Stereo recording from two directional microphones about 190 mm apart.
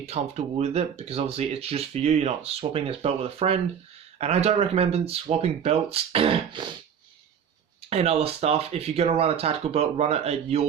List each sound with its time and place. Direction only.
0.0 s speech: 35° right (ahead or behind)
7.9 s speech: 35° right (ahead or behind)